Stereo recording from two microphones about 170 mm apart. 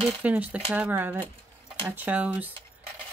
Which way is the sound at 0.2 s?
10° right (ahead or behind).